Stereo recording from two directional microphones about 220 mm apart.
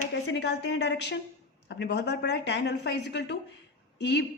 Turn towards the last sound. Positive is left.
turn(degrees=50)  # may be behind; listen again after turning